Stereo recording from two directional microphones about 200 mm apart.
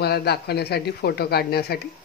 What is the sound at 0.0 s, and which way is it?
Speech, 55° left (ahead or behind).